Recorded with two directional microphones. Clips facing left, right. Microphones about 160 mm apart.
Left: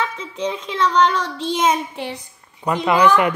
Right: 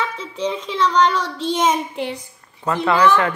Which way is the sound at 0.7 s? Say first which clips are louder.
Even; 10° left (ahead or behind).